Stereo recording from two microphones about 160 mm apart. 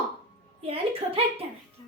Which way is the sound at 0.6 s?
35° right (ahead or behind).